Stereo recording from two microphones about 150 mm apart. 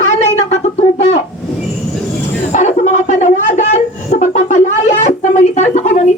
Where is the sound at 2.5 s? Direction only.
50° left (ahead or behind).